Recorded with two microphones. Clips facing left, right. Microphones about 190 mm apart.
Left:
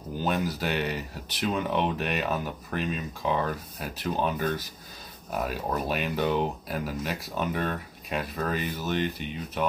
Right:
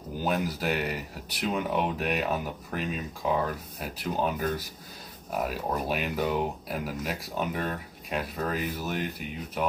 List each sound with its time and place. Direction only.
0.2 s speech: 5° right (ahead or behind)